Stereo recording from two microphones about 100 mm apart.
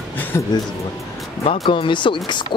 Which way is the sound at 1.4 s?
65° left (ahead or behind).